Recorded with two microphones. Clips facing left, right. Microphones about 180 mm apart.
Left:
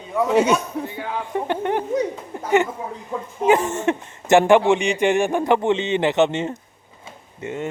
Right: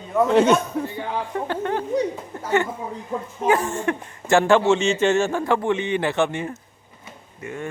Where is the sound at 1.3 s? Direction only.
20° left (ahead or behind).